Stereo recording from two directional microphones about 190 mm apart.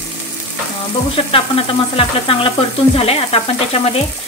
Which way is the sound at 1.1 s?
30° left (ahead or behind).